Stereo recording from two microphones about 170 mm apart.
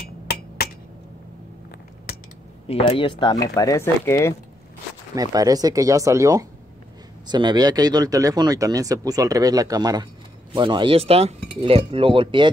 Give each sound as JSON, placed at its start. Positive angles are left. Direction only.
{"t": 0.6, "sound": "a sound", "side_deg": 65}
{"t": 2.7, "sound": "speech", "side_deg": 35}
{"t": 5.1, "sound": "speech", "side_deg": -20}